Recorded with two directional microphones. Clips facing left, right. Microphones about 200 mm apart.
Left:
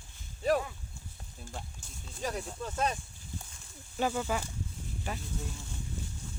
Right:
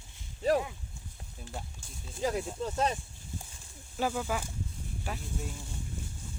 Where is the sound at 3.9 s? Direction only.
Centre (ahead or behind).